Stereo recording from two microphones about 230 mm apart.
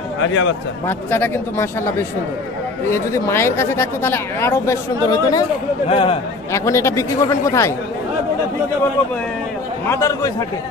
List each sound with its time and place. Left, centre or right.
0.2 s speech: left
0.8 s speech: centre
6.5 s speech: centre
9.8 s speech: centre